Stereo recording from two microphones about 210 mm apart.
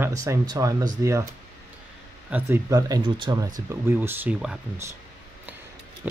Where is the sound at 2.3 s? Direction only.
10° right (ahead or behind).